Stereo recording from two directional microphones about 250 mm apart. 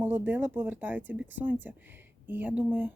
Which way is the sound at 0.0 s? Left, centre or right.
Centre.